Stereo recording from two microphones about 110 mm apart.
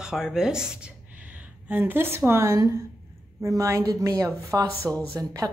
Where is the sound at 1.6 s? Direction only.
15° right (ahead or behind).